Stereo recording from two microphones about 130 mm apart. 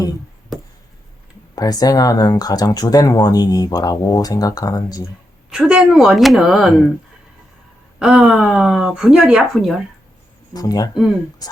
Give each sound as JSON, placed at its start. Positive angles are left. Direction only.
{"t": 1.5, "sound": "speech", "side_deg": 30}
{"t": 5.5, "sound": "speech", "side_deg": -5}
{"t": 7.9, "sound": "speech", "side_deg": -5}
{"t": 10.5, "sound": "speech", "side_deg": 30}